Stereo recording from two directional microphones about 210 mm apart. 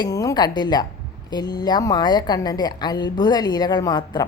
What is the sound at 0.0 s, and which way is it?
A woman's voice, 15° left (ahead or behind).